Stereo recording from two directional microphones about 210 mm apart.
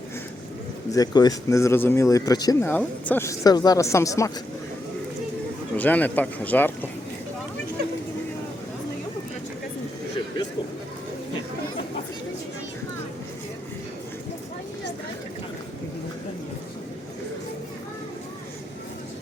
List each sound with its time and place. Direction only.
0.9 s speech: 20° left (ahead or behind)
5.7 s speech: 10° left (ahead or behind)